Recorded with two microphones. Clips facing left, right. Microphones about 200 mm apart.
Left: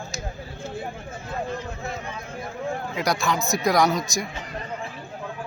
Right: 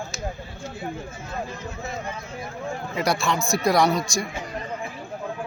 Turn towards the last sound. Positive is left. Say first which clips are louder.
# right 1 dB
turn(degrees=0)  # may be behind; listen again after turning